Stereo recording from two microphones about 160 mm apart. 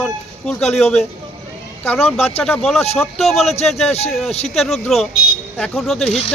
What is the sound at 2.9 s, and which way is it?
Speech, centre (ahead or behind).